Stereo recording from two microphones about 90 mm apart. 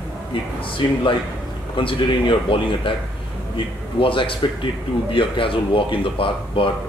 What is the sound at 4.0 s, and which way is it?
A man's voice, 80° left.